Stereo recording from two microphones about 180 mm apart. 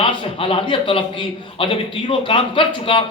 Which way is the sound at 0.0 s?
30° left (ahead or behind).